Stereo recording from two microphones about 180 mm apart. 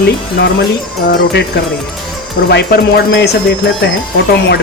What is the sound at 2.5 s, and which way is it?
Music, 60° left (ahead or behind).